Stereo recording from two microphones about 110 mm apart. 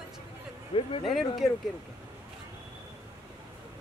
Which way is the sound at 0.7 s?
55° left (ahead or behind).